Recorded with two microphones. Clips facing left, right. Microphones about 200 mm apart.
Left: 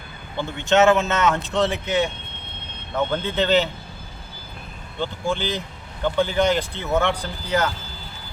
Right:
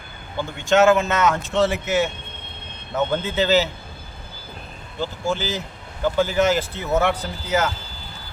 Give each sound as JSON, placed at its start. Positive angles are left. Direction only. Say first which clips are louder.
{"t": 0.7, "sound": "speech", "louder": "right 1 dB", "side_deg": 0}
{"t": 4.9, "sound": "speech", "louder": "even", "side_deg": -5}